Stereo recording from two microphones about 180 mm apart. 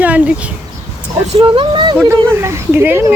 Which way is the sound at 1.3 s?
30° right (ahead or behind).